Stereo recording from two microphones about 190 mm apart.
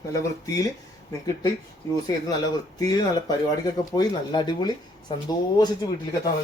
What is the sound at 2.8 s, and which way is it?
A man's voice, 20° left (ahead or behind).